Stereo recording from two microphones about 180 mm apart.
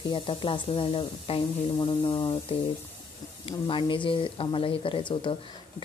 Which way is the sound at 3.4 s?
30° left (ahead or behind).